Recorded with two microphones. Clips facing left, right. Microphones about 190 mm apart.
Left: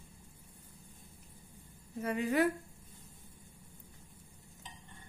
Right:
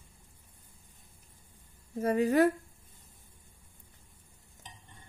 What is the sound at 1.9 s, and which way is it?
Speech, 40° right (ahead or behind).